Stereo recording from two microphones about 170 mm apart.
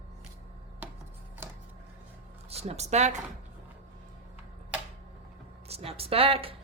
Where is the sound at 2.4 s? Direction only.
35° right (ahead or behind).